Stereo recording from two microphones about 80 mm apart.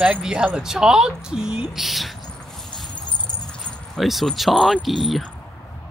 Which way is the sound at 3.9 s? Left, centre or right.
Centre.